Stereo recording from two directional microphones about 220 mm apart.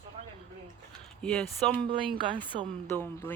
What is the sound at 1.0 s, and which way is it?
Speech, 5° left (ahead or behind).